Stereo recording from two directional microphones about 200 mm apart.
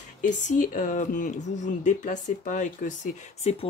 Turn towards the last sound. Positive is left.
turn(degrees=30)  # may be behind; listen again after turning